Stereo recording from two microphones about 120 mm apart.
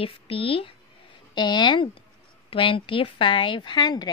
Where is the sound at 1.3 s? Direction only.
40° left (ahead or behind).